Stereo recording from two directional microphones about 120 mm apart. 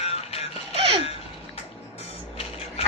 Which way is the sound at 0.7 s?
55° right (ahead or behind).